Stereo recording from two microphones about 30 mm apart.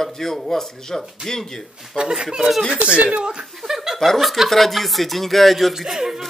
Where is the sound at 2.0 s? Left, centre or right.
Right.